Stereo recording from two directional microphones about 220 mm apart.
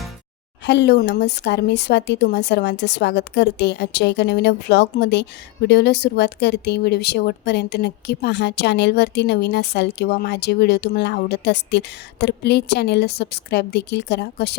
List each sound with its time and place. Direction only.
0.6 s speech: 50° left (ahead or behind)